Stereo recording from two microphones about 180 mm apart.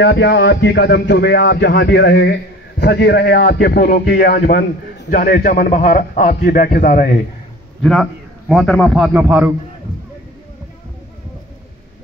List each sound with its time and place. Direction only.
0.0 s a man's voice: 70° left (ahead or behind); by 7.2 s 50° left (ahead or behind)
7.8 s a man's voice: centre (ahead or behind)